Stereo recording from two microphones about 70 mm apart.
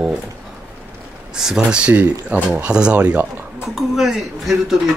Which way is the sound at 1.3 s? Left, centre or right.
Centre.